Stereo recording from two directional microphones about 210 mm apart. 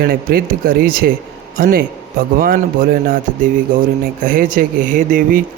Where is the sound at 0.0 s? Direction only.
45° right (ahead or behind).